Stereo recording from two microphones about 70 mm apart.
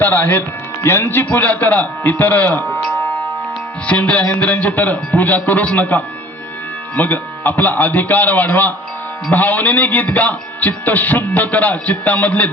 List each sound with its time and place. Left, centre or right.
0.0 s a man's voice: left
3.8 s a man's voice: centre